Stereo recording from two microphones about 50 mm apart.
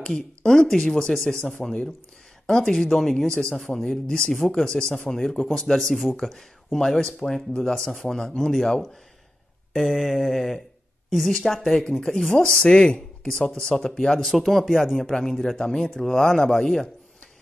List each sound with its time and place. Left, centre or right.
0.0 s speech: centre
5.5 s a sound: centre
6.1 s speech: centre
9.7 s a sound: centre
11.1 s a woman's voice: centre
12.3 s speech: centre
14.2 s speech: centre